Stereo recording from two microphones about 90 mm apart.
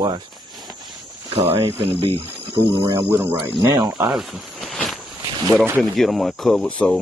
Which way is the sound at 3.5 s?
45° right (ahead or behind).